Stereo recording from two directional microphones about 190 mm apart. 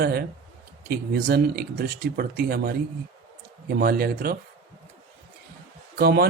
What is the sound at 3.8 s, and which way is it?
Speech, 55° right (ahead or behind).